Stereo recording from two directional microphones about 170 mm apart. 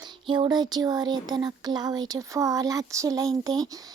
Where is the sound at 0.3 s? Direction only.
25° right (ahead or behind).